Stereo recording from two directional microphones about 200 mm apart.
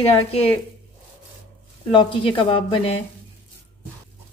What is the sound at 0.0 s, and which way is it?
Speech, 30° left (ahead or behind).